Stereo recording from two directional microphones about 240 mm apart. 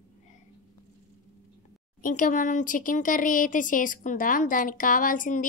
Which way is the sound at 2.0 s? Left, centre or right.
Left.